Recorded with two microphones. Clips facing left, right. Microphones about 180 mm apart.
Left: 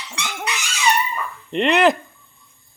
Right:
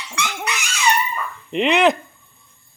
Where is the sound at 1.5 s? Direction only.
Centre (ahead or behind).